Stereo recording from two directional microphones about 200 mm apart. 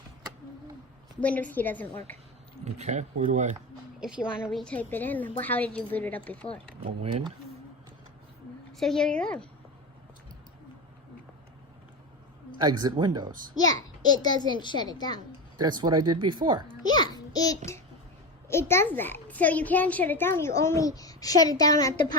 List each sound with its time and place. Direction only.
1.2 s a child's voice: 5° left (ahead or behind)
2.6 s speech: 35° right (ahead or behind)
4.0 s a child's voice: 5° right (ahead or behind)
6.8 s speech: 30° right (ahead or behind)
8.8 s a woman's voice: 5° left (ahead or behind)
12.5 s speech: 20° right (ahead or behind)
13.6 s a child's voice: 20° left (ahead or behind)
15.5 s speech: 20° right (ahead or behind)
16.8 s a child's voice: 20° left (ahead or behind)